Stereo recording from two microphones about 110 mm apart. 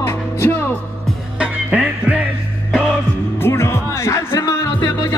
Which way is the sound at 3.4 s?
25° left (ahead or behind).